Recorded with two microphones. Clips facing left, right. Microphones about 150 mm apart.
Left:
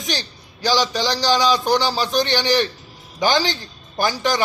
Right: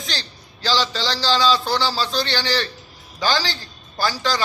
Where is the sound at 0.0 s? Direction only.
15° left (ahead or behind).